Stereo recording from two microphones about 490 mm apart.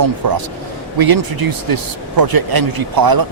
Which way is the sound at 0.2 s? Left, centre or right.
Right.